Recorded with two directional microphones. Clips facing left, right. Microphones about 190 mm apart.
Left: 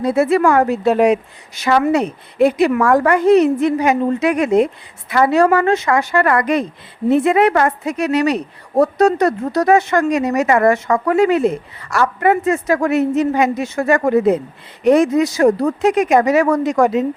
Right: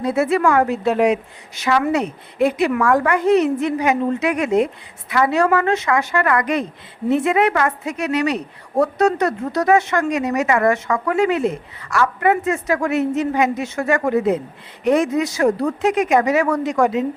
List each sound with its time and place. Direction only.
0.0 s a woman's voice: 35° left (ahead or behind)